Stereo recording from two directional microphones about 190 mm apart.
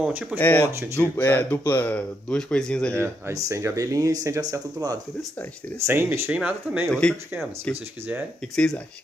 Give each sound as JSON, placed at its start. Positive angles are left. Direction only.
{"t": 0.0, "sound": "speech", "side_deg": -10}
{"t": 0.4, "sound": "speech", "side_deg": 10}
{"t": 3.0, "sound": "speech", "side_deg": -15}
{"t": 6.9, "sound": "speech", "side_deg": 5}